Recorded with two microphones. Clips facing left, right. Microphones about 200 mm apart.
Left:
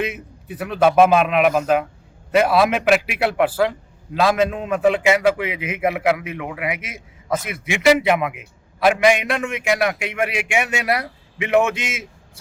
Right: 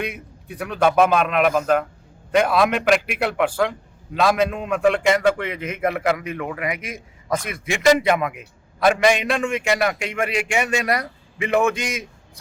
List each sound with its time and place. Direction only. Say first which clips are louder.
0.0 s a man's voice: left 3 dB; 5° left (ahead or behind)